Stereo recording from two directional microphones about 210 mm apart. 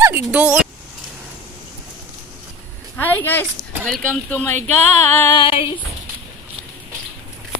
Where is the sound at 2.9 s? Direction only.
10° left (ahead or behind).